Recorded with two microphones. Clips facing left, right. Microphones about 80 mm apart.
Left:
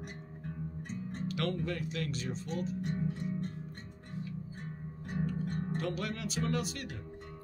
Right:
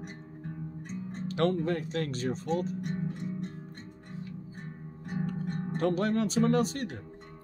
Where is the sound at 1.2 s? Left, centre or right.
Right.